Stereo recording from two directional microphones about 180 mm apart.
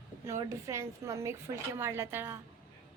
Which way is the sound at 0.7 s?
15° right (ahead or behind).